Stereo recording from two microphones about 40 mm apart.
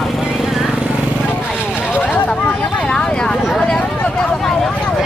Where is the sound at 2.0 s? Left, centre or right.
Left.